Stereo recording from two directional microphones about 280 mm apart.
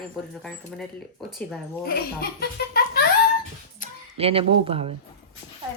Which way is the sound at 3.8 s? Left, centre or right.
Left.